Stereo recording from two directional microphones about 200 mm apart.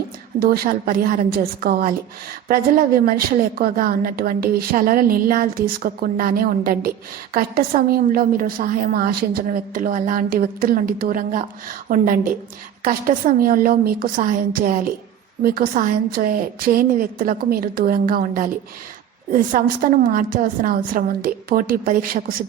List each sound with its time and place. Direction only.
0.3 s a woman's voice: 50° right (ahead or behind)